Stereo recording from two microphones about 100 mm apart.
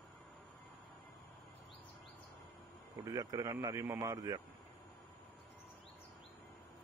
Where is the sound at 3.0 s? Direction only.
35° right (ahead or behind).